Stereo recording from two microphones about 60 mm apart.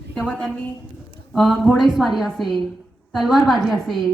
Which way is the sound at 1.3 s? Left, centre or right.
Centre.